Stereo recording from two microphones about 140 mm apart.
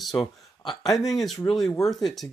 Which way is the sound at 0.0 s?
Centre (ahead or behind).